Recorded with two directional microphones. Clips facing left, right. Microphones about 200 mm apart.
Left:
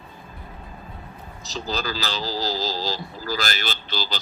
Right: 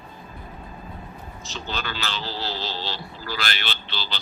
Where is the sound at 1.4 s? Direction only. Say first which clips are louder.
Left 4 dB; 35° left (ahead or behind).